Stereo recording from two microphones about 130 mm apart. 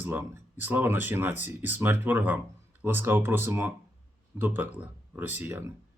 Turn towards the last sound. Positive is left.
turn(degrees=-15)  # may be behind; listen again after turning